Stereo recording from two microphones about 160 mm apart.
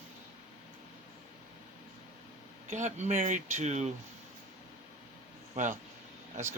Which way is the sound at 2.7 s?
50° right (ahead or behind).